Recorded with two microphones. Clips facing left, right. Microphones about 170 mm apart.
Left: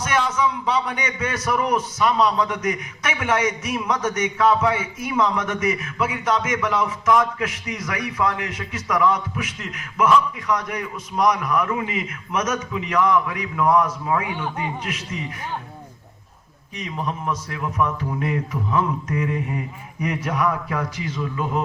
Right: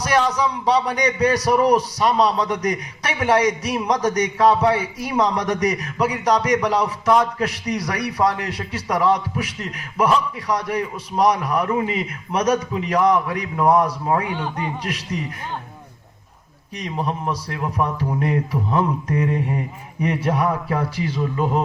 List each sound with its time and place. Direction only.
0.0 s a man's voice: 35° right (ahead or behind)
16.7 s a man's voice: 35° right (ahead or behind)